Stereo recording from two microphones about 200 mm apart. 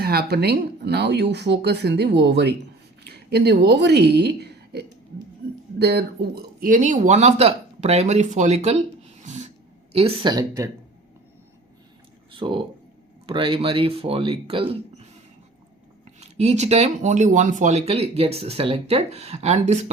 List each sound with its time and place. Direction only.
0.0 s a woman's voice: 50° right (ahead or behind); by 8.8 s 35° right (ahead or behind)
9.2 s a sound: 35° right (ahead or behind)
9.9 s speech: 30° right (ahead or behind)
12.3 s speech: 25° right (ahead or behind)
16.2 s speech: 35° right (ahead or behind)